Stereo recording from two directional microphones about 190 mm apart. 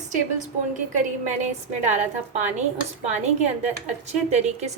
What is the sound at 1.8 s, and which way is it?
A woman's voice, 40° right (ahead or behind).